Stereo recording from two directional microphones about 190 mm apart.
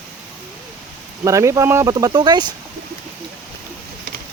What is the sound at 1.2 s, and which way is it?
Speech, 15° right (ahead or behind).